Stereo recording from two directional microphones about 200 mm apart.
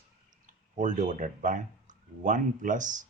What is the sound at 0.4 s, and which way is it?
Speech, 40° right (ahead or behind).